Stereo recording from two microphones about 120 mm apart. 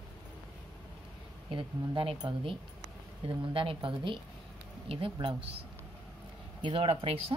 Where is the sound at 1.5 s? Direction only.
45° right (ahead or behind).